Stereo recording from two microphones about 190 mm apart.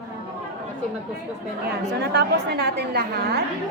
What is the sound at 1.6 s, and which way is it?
A woman's voice, 60° right (ahead or behind).